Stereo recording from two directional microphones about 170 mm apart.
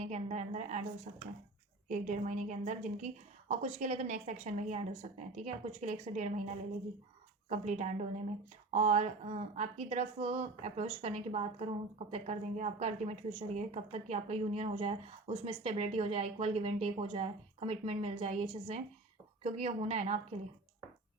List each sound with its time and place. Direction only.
0.0 s a woman's voice: 40° right (ahead or behind)